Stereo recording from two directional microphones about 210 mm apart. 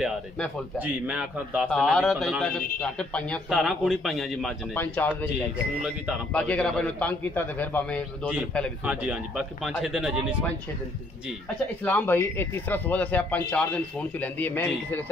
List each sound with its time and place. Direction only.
0.7 s a man's voice: 5° right (ahead or behind)
8.8 s a man's voice: 5° right (ahead or behind)
11.8 s speech: 10° left (ahead or behind)